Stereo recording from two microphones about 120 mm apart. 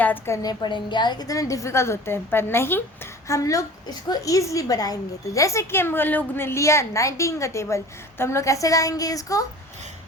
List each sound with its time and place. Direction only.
0.0 s a woman's voice: 15° left (ahead or behind)
0.4 s a woman's voice: 40° left (ahead or behind)